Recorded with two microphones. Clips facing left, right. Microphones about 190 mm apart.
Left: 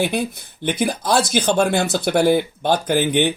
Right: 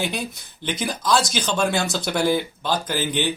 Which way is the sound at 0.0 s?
55° left (ahead or behind).